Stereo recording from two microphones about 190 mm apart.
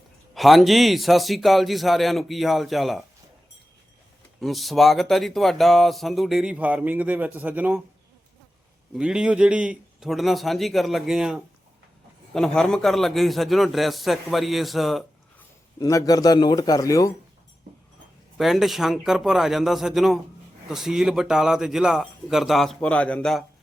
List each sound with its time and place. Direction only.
0.3 s speech: centre (ahead or behind)
4.4 s speech: centre (ahead or behind)
9.0 s speech: 5° right (ahead or behind)
15.8 s a man's voice: 20° left (ahead or behind)
18.3 s speech: centre (ahead or behind)